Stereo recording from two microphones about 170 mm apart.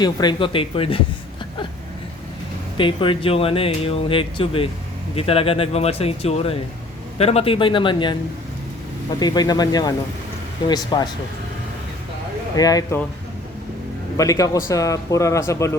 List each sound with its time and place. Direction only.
0.0 s speech: 25° left (ahead or behind)
2.7 s speech: 30° left (ahead or behind)
9.1 s speech: 25° left (ahead or behind)
12.5 s speech: 20° left (ahead or behind)
14.2 s speech: 20° left (ahead or behind)